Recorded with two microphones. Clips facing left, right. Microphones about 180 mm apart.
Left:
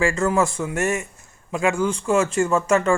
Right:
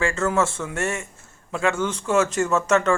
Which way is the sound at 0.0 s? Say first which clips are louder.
Left 2 dB; 15° left (ahead or behind).